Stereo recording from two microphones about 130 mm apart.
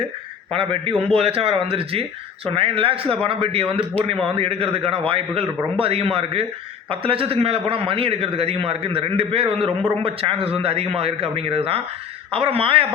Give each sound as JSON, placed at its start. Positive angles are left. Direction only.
{"t": 0.5, "sound": "a man's voice", "side_deg": -45}